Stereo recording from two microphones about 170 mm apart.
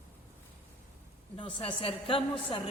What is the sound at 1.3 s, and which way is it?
A woman's voice, 30° left (ahead or behind).